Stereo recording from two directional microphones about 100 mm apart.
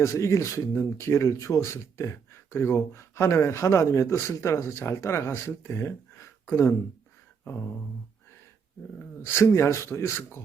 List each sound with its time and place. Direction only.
0.0 s speech: 30° left (ahead or behind)
9.2 s speech: 25° left (ahead or behind)